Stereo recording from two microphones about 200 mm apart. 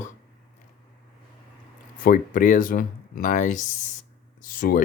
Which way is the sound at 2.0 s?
45° left (ahead or behind).